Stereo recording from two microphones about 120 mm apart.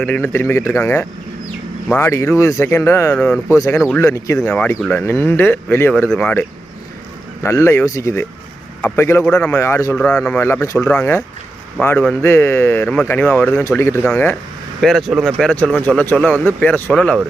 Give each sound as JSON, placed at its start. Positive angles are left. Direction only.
{"t": 0.0, "sound": "speech", "side_deg": 15}
{"t": 4.4, "sound": "speech", "side_deg": 10}
{"t": 7.4, "sound": "speech", "side_deg": 25}
{"t": 10.0, "sound": "speech", "side_deg": 5}
{"t": 10.4, "sound": "speech", "side_deg": 20}
{"t": 13.7, "sound": "speech", "side_deg": 20}
{"t": 14.0, "sound": "speech", "side_deg": 10}